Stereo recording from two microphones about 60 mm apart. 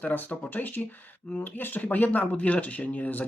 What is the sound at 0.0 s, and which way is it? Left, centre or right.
Speech, left.